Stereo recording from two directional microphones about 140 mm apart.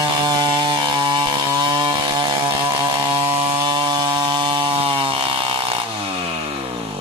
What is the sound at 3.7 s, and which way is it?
Chainsaw, 35° right (ahead or behind).